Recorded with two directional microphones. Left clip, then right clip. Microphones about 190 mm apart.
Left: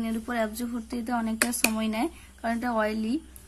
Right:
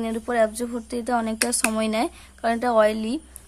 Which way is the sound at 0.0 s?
40° right (ahead or behind).